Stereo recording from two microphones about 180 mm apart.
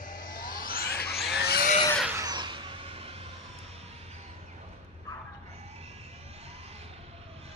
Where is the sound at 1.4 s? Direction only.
60° left (ahead or behind).